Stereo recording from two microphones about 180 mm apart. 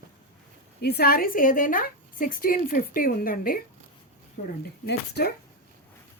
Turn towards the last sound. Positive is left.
turn(degrees=65)  # may be behind; listen again after turning